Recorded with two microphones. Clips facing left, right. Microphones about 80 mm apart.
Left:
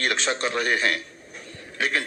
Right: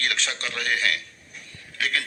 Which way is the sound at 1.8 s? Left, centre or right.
Left.